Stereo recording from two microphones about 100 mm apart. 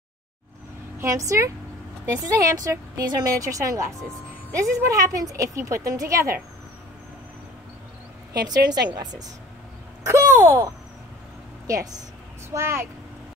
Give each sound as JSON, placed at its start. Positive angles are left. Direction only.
{"t": 0.9, "sound": "speech", "side_deg": -30}
{"t": 8.3, "sound": "speech", "side_deg": -40}
{"t": 10.0, "sound": "speech", "side_deg": -30}